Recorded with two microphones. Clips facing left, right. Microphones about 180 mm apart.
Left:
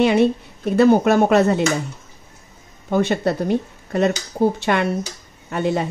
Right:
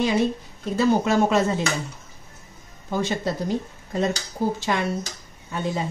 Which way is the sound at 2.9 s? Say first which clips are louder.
Left 6 dB; 60° left (ahead or behind).